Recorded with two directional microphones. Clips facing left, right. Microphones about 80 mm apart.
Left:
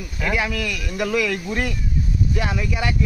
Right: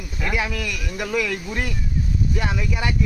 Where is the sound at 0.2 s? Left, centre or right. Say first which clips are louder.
Left 2 dB; centre.